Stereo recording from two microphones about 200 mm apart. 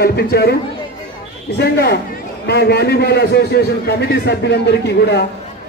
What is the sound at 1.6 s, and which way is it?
A man's voice, 55° left (ahead or behind).